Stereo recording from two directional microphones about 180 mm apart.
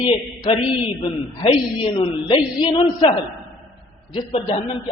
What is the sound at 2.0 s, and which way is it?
A woman's voice, 25° left (ahead or behind).